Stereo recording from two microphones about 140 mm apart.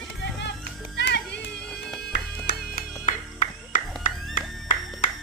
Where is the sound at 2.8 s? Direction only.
70° left (ahead or behind).